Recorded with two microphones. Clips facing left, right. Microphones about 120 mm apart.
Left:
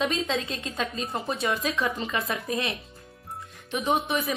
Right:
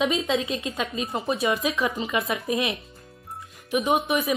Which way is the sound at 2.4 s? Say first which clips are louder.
Right 4 dB; 20° right (ahead or behind).